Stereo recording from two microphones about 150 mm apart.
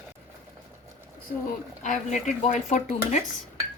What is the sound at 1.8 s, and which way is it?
Speech, 55° left (ahead or behind).